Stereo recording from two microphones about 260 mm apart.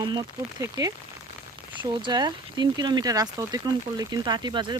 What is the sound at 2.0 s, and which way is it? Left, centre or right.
Speech, centre.